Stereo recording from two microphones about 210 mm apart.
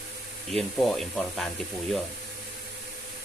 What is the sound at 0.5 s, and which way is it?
Speech, centre (ahead or behind).